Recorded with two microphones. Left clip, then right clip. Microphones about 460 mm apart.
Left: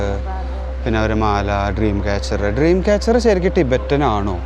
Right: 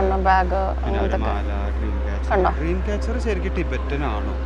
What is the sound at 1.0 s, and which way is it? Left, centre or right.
Speech, left.